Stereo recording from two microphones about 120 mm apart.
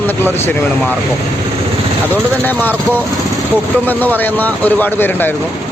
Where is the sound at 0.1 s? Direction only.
20° left (ahead or behind).